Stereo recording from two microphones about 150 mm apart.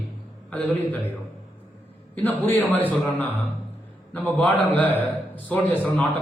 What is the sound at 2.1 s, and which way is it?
A man's voice, 10° left (ahead or behind).